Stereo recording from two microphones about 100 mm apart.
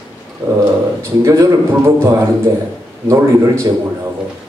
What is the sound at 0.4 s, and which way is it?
Speech, 20° right (ahead or behind).